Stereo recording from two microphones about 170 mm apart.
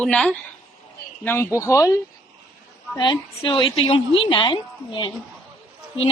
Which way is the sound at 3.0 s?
25° left (ahead or behind).